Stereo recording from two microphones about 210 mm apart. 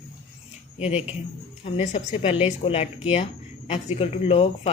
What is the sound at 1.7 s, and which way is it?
Speech, 30° left (ahead or behind).